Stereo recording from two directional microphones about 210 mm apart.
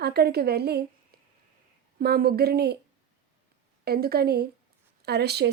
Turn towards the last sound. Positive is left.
turn(degrees=-50)  # may be behind; listen again after turning